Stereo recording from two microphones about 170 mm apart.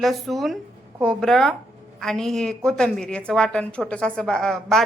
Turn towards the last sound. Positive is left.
turn(degrees=0)  # may be behind; listen again after turning